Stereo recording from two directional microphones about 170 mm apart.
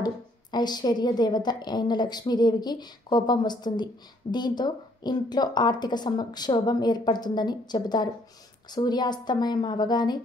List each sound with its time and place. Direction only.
0.0 s a woman's voice: 25° left (ahead or behind)